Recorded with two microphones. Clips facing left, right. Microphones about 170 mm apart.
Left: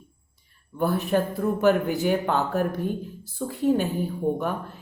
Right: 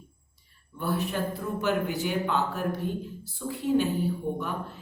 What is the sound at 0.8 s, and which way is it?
Speech, 50° left (ahead or behind).